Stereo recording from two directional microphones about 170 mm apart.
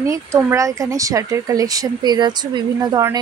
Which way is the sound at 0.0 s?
15° right (ahead or behind).